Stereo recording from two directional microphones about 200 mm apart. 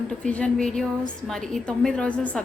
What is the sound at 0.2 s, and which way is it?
A woman's voice, 5° left (ahead or behind).